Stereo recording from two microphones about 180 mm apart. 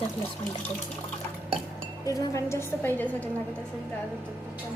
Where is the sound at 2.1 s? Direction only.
15° left (ahead or behind).